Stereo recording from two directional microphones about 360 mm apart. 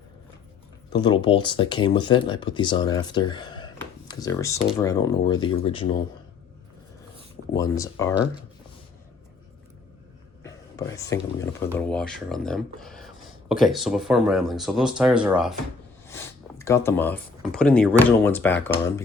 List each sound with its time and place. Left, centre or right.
0.9 s speech: centre
7.5 s speech: centre
10.4 s speech: centre